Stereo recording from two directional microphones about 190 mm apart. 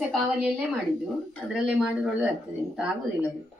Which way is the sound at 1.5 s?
5° right (ahead or behind).